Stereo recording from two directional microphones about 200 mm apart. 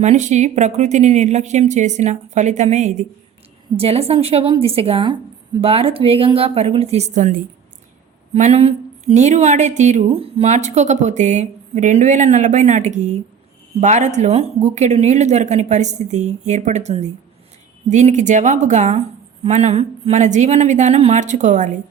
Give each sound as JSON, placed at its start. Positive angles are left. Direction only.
{"t": 0.0, "sound": "a woman's voice", "side_deg": -35}